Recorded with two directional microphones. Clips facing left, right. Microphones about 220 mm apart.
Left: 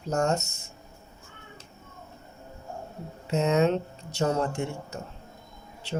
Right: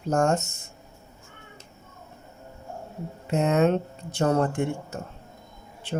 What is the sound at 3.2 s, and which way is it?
Mantra, 55° right (ahead or behind).